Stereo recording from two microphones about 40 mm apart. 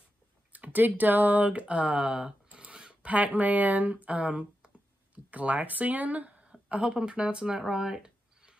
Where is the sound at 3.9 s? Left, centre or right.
Right.